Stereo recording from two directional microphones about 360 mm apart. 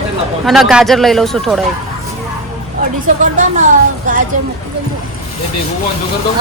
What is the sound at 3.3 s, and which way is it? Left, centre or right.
Speech, right.